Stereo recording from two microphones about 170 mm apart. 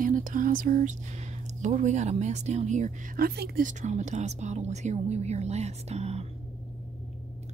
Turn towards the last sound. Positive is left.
turn(degrees=-40)  # may be behind; listen again after turning